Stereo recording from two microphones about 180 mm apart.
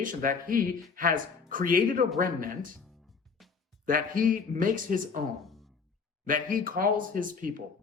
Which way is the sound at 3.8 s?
50° right (ahead or behind).